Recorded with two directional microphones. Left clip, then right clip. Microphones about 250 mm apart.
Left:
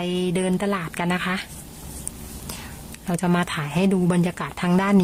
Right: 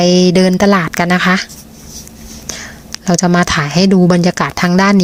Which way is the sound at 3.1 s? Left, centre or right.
Centre.